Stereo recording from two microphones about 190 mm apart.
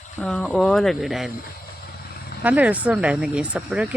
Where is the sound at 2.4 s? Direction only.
10° right (ahead or behind).